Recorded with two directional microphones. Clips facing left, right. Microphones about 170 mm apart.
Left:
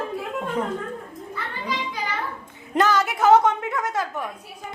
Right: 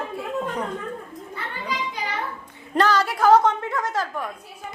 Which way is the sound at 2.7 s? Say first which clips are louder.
Even; 20° left (ahead or behind).